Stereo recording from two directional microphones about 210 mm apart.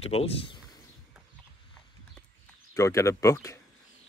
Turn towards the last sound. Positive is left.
turn(degrees=15)  # may be behind; listen again after turning